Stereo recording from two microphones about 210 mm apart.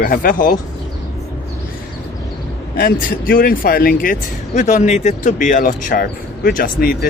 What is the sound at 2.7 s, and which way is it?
Speech, 45° left (ahead or behind).